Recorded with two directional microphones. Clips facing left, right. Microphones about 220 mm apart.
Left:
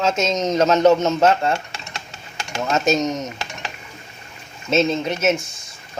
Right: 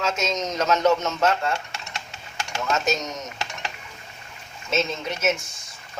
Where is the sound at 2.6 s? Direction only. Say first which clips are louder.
Left 5 dB; 25° left (ahead or behind).